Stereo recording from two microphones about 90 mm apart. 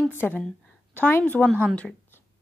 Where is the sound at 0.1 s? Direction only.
20° left (ahead or behind).